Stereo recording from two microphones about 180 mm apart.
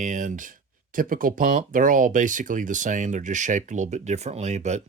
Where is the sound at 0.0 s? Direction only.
45° right (ahead or behind).